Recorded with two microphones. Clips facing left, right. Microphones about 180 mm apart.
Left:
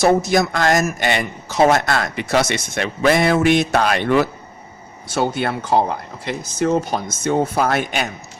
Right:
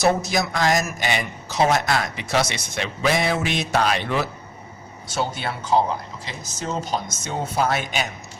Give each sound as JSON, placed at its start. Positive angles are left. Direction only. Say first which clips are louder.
{"t": 0.0, "sound": "speech", "louder": "left 5 dB", "side_deg": 50}